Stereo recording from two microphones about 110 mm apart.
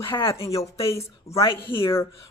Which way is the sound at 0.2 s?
25° left (ahead or behind).